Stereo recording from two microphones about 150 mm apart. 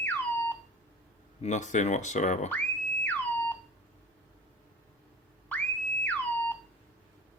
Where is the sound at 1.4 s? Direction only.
50° left (ahead or behind).